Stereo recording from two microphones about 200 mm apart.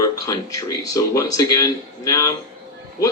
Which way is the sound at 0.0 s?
15° left (ahead or behind).